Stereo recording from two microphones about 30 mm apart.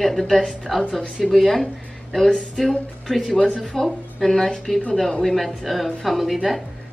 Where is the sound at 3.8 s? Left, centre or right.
Centre.